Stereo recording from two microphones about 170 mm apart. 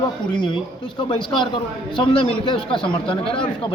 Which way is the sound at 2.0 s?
30° left (ahead or behind).